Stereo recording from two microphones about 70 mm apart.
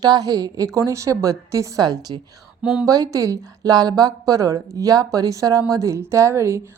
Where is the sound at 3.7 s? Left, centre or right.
Right.